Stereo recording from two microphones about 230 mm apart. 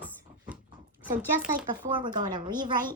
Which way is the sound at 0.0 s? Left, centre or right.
Centre.